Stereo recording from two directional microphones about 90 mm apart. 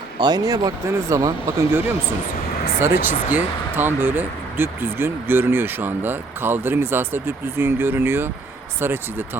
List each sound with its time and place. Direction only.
0.2 s speech: 50° right (ahead or behind)
2.8 s speech: 20° right (ahead or behind)